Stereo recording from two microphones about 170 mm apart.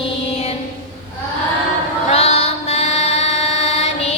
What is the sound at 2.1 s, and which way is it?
Mantra, 40° left (ahead or behind).